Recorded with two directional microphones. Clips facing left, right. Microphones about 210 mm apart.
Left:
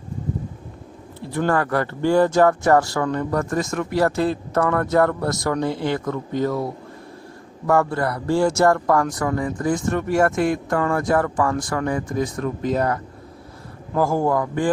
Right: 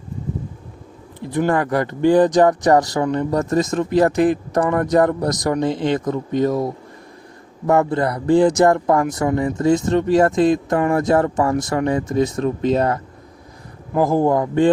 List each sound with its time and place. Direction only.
1.2 s speech: 15° right (ahead or behind)
7.7 s speech: 20° right (ahead or behind)